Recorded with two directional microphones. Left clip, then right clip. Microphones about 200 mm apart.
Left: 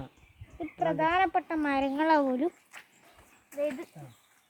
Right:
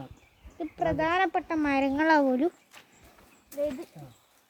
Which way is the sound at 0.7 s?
25° right (ahead or behind).